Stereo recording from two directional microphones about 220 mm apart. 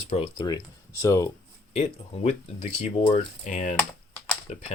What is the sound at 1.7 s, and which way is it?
Speech, 30° left (ahead or behind).